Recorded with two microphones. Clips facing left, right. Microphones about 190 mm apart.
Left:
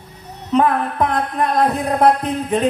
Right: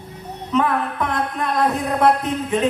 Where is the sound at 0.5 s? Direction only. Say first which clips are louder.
Left 3 dB; 35° left (ahead or behind).